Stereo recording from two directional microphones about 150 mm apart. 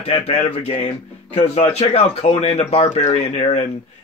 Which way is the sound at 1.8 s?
40° left (ahead or behind).